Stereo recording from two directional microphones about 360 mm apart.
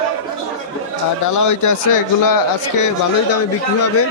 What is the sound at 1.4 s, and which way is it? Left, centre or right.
Speech, left.